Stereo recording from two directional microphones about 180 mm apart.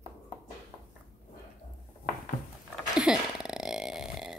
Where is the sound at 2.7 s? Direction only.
5° right (ahead or behind).